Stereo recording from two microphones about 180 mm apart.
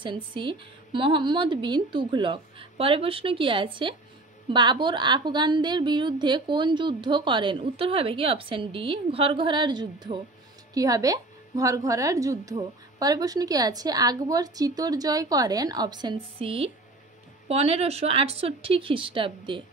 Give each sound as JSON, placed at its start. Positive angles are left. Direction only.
{"t": 0.0, "sound": "a woman's voice", "side_deg": -25}